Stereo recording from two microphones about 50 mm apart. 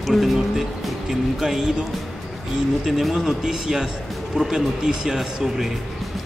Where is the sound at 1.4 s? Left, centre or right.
Centre.